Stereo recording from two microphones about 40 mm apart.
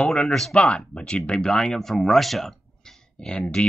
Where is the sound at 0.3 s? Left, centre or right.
Centre.